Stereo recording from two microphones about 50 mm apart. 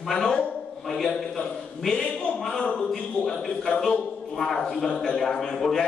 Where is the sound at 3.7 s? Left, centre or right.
Centre.